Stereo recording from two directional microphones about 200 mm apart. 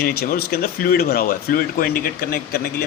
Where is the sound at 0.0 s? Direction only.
50° left (ahead or behind).